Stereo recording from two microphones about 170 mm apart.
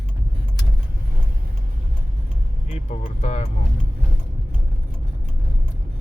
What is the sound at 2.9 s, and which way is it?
Speech, 45° left (ahead or behind).